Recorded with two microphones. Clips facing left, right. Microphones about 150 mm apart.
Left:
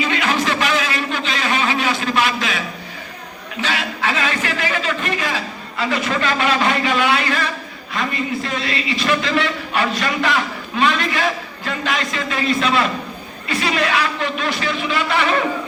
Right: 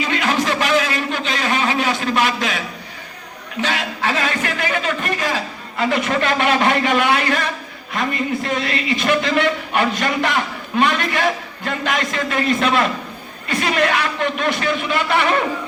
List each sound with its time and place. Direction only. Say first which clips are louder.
0.1 s a sound: even; 45° right (ahead or behind)
3.6 s a man's voice: right 1 dB; 45° right (ahead or behind)
5.8 s a man's voice: right 2 dB; 55° right (ahead or behind)